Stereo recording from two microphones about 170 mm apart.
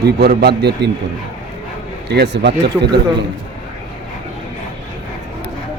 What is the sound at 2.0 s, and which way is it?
Speech, 80° right.